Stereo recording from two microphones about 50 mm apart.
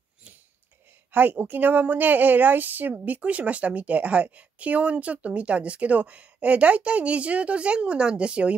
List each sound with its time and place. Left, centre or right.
1.1 s a woman's voice: right